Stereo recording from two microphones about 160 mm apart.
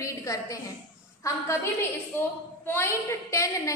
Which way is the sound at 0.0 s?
20° left (ahead or behind).